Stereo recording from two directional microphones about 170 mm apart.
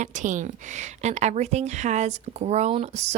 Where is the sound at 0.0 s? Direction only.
45° right (ahead or behind).